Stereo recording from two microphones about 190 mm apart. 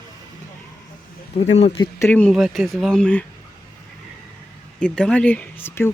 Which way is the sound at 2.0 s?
10° left (ahead or behind).